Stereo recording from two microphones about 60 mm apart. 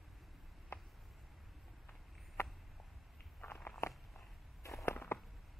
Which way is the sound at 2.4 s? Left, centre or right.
Left.